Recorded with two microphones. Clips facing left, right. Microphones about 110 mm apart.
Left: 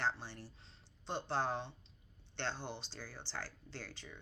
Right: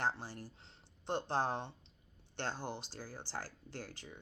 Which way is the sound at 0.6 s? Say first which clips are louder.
Right 4 dB; 55° right (ahead or behind).